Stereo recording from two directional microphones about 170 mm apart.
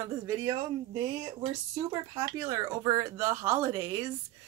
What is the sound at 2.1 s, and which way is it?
Speech, 20° right (ahead or behind).